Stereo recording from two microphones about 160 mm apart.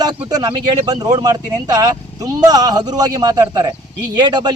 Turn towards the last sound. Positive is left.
turn(degrees=-25)  # may be behind; listen again after turning